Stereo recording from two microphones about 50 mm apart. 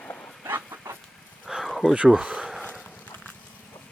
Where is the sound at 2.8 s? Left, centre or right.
Centre.